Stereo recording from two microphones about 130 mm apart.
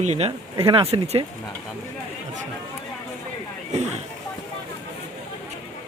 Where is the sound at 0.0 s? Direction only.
55° right (ahead or behind).